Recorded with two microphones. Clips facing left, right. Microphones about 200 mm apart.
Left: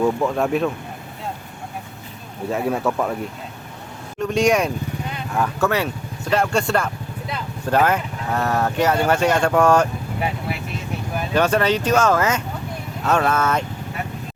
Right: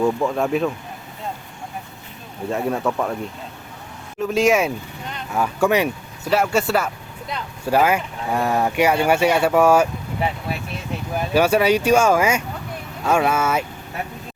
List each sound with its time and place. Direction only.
0.0 s speech: centre (ahead or behind)
2.5 s speech: centre (ahead or behind)
4.2 s speech: 5° right (ahead or behind)
11.3 s speech: 10° right (ahead or behind)